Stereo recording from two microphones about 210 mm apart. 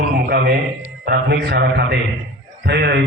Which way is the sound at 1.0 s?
45° right (ahead or behind).